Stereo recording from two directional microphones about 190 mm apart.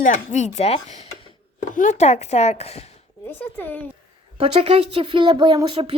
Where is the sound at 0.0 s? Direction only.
40° left (ahead or behind).